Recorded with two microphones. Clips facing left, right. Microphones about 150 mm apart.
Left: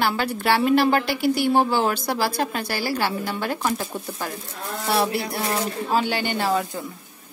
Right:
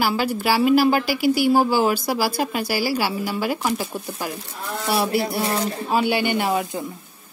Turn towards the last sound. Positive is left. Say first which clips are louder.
# right 1 dB
turn(degrees=-15)  # may be behind; listen again after turning